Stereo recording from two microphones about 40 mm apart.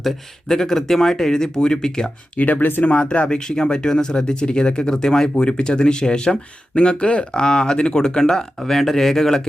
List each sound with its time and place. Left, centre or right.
0.0 s speech: centre
2.4 s speech: left
2.8 s speech: left; by 9.4 s centre